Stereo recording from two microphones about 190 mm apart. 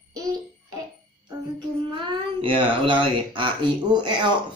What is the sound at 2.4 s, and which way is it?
Speech, 25° right (ahead or behind).